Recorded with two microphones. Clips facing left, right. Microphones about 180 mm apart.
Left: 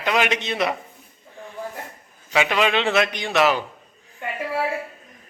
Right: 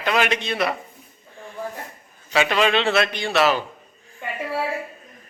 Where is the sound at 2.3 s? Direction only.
15° left (ahead or behind).